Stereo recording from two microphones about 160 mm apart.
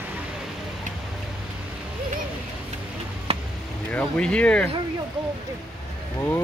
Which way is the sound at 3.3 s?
35° right (ahead or behind).